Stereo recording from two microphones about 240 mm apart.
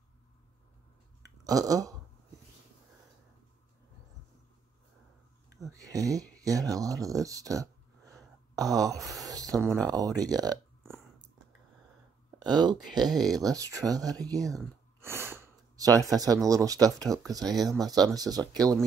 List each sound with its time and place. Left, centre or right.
1.4 s speech: centre
5.6 s a sound: centre
6.4 s speech: centre
9.0 s speech: centre
9.3 s a sound: centre
9.9 s speech: centre
12.5 s speech: centre
15.0 s a sound: centre
16.1 s speech: centre